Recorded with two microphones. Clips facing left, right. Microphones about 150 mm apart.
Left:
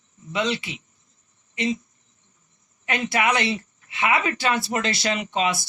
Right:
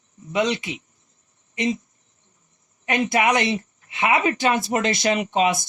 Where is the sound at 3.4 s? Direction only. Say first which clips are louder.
Right 2 dB; 45° right (ahead or behind).